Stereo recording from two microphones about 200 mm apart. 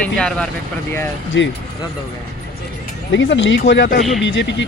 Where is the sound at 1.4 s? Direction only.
65° left (ahead or behind).